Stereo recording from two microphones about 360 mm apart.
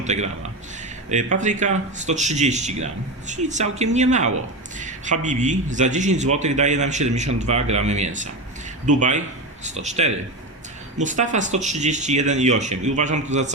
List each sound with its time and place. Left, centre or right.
0.0 s speech: centre
1.4 s a man's voice: centre